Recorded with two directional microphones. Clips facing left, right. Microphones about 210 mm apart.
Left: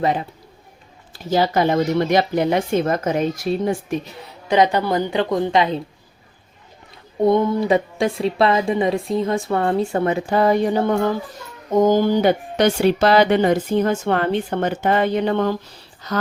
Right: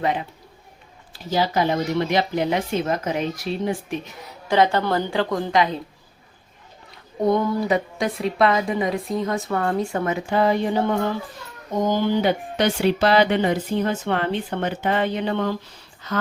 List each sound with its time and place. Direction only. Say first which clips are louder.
0.0 s a man's voice: left 3 dB; 40° left (ahead or behind)
1.3 s speech: left 4 dB; 50° left (ahead or behind)
4.2 s speech: left 2 dB; 20° left (ahead or behind)
7.3 s a man's voice: left 3 dB; 20° left (ahead or behind); by 16.2 s 40° left (ahead or behind)